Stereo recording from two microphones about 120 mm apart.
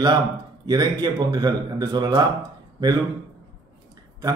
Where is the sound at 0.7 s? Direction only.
35° right (ahead or behind).